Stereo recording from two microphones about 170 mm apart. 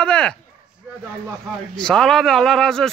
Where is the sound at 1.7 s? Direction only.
5° left (ahead or behind).